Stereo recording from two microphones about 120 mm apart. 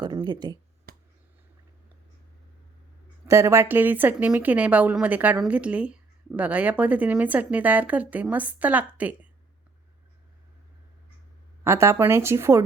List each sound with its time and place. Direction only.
0.0 s speech: 35° right (ahead or behind)
3.2 s speech: 25° right (ahead or behind)
11.6 s speech: 20° right (ahead or behind)